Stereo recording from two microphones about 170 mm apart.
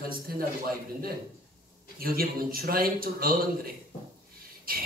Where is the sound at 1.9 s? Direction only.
60° right (ahead or behind).